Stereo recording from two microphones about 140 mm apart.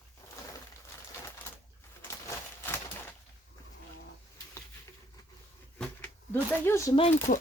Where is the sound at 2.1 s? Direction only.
20° left (ahead or behind).